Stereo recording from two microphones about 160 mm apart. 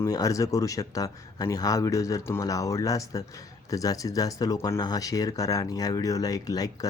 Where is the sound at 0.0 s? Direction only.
20° left (ahead or behind).